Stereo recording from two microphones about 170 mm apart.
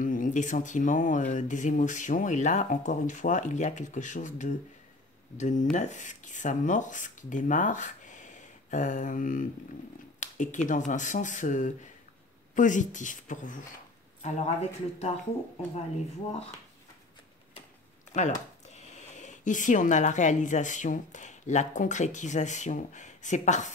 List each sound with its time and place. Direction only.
0.0 s speech: 50° left (ahead or behind)
18.1 s speech: 45° left (ahead or behind)